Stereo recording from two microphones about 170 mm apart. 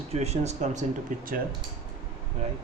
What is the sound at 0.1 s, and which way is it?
Speech, 40° right (ahead or behind).